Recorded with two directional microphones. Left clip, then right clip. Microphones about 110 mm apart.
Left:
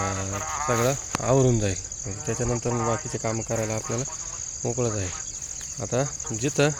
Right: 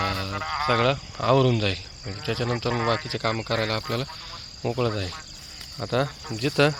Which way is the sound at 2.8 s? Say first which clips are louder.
Right 2 dB; 10° right (ahead or behind).